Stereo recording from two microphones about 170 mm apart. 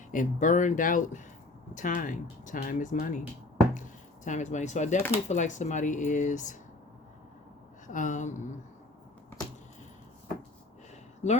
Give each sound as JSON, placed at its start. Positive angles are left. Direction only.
{"t": 0.1, "sound": "speech", "side_deg": 50}
{"t": 7.9, "sound": "speech", "side_deg": 50}
{"t": 11.2, "sound": "speech", "side_deg": 45}